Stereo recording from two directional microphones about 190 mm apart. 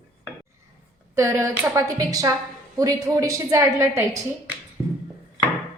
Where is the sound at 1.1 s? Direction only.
15° right (ahead or behind).